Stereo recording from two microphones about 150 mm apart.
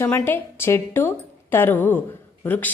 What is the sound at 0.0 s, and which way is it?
A woman's voice, 15° left (ahead or behind).